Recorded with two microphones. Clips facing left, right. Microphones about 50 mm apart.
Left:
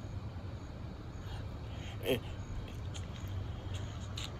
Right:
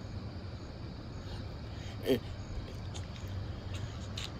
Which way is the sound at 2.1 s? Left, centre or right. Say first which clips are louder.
Right 3 dB; left.